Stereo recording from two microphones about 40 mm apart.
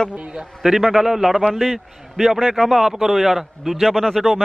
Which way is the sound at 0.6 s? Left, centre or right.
Centre.